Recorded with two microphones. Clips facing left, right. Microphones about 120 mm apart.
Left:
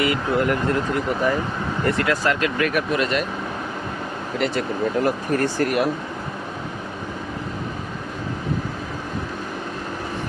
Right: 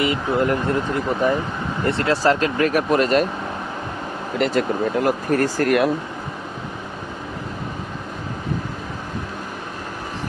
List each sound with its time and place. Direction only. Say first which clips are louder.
0.0 s speech: right 1 dB; 25° right (ahead or behind); by 3.2 s 40° right (ahead or behind)
4.4 s speech: right 3 dB; 45° right (ahead or behind)